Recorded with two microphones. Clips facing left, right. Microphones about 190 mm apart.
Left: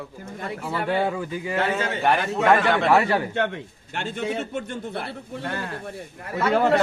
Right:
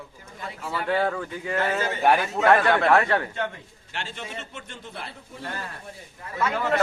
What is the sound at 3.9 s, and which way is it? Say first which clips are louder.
A man's voice: left 8 dB; 50° left (ahead or behind).